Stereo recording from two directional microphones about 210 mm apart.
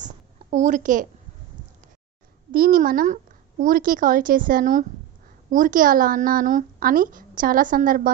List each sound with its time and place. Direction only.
0.5 s speech: 35° right (ahead or behind)
2.5 s a child's voice: 45° right (ahead or behind)